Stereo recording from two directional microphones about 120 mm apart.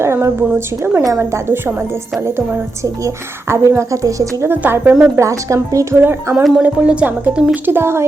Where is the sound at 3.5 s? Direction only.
25° right (ahead or behind).